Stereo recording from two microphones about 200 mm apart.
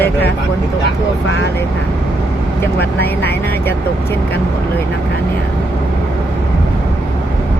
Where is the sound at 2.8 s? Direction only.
55° left (ahead or behind).